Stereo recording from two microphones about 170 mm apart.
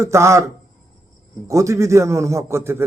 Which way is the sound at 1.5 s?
20° right (ahead or behind).